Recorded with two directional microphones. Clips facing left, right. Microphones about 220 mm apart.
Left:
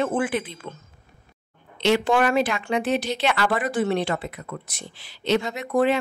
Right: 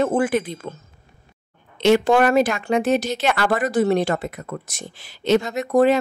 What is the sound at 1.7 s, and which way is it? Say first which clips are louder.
Speech: right 5 dB; 50° right (ahead or behind).